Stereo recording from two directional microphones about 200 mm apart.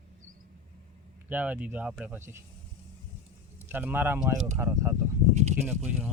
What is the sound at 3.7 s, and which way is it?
Speech, 10° right (ahead or behind).